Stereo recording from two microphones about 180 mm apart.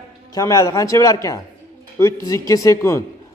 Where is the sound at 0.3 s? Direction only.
20° left (ahead or behind).